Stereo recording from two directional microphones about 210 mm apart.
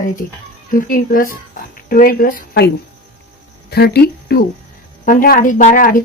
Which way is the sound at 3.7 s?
50° left (ahead or behind).